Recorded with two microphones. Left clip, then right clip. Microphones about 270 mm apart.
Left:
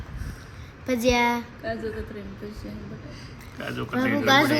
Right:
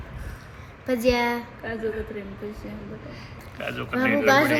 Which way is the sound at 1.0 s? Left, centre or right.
Centre.